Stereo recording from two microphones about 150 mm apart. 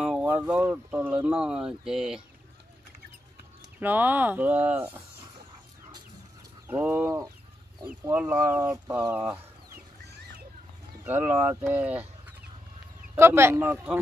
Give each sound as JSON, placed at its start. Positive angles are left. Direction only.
{"t": 0.0, "sound": "speech", "side_deg": -10}
{"t": 3.8, "sound": "speech", "side_deg": -10}
{"t": 6.7, "sound": "speech", "side_deg": -15}
{"t": 11.1, "sound": "speech", "side_deg": -15}